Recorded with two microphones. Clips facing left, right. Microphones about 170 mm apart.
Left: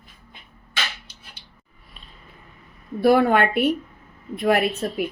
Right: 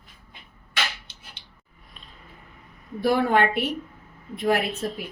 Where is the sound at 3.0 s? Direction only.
65° left (ahead or behind).